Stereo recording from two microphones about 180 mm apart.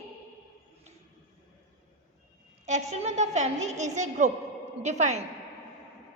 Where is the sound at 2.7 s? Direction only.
40° right (ahead or behind).